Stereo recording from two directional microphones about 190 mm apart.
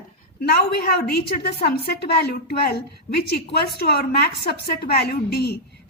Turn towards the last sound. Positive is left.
turn(degrees=55)  # may be behind; listen again after turning